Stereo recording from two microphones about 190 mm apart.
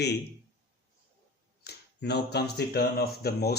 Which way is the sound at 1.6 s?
60° left (ahead or behind).